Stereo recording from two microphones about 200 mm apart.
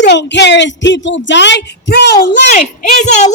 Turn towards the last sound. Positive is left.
turn(degrees=35)  # may be behind; listen again after turning